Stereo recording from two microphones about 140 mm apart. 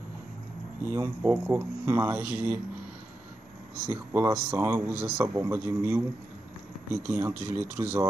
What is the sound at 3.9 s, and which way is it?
Speech, 20° right (ahead or behind).